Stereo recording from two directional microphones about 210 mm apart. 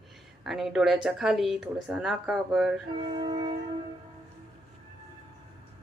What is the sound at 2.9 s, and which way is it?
Music, 25° right (ahead or behind).